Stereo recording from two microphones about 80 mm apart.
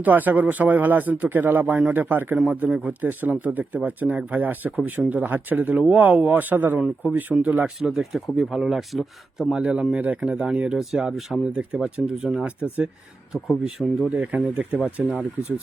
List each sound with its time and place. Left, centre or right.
0.0 s speech: right
2.3 s speech: centre
3.0 s speech: right
7.8 s speech: centre
9.6 s speech: centre
12.5 s speech: centre
13.3 s speech: centre
14.1 s speech: centre